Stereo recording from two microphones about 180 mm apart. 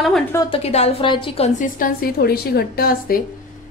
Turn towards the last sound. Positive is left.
turn(degrees=55)  # may be behind; listen again after turning